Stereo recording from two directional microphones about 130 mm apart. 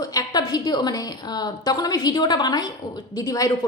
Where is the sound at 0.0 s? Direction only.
30° left (ahead or behind).